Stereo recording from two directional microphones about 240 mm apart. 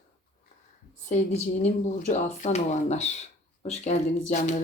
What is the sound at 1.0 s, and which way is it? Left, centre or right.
Speech, left.